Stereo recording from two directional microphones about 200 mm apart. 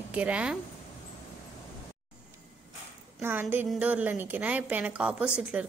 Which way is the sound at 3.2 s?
10° right (ahead or behind).